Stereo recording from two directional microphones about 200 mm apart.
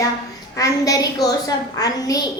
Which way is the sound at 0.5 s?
15° left (ahead or behind).